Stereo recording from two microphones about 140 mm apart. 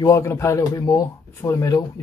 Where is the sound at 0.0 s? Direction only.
20° left (ahead or behind).